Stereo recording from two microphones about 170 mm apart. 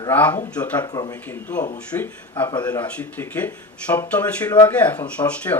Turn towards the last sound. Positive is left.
turn(degrees=10)  # may be behind; listen again after turning